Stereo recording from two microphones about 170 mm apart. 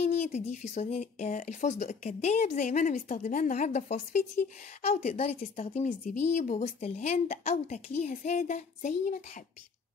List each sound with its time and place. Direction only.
0.0 s speech: 40° left (ahead or behind)